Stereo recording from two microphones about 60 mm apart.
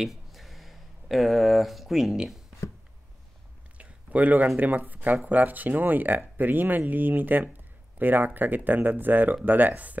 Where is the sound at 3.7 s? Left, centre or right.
Right.